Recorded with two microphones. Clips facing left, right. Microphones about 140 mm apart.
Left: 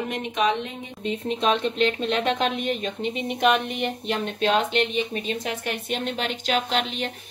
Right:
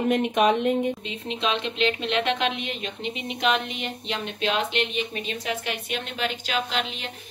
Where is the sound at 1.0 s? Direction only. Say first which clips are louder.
Left 5 dB; 45° left (ahead or behind).